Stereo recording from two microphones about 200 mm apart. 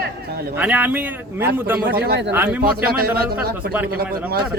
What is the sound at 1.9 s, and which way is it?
Speech, 50° right (ahead or behind).